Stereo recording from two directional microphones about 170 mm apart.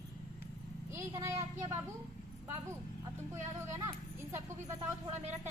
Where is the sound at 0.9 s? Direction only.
15° right (ahead or behind).